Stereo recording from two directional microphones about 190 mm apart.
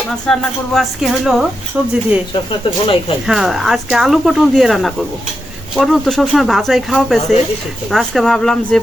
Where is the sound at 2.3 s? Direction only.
25° left (ahead or behind).